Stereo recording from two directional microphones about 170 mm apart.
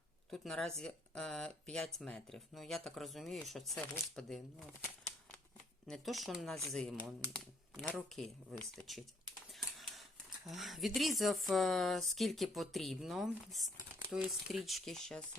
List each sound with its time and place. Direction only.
0.3 s speech: centre (ahead or behind)
5.9 s speech: centre (ahead or behind)